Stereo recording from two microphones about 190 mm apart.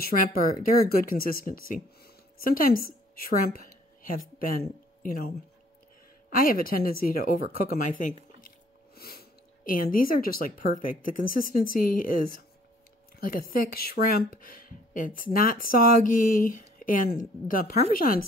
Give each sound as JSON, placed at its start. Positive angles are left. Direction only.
{"t": 0.0, "sound": "speech", "side_deg": 50}
{"t": 6.3, "sound": "speech", "side_deg": 50}